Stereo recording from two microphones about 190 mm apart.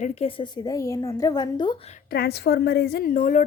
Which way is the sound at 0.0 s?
30° left (ahead or behind).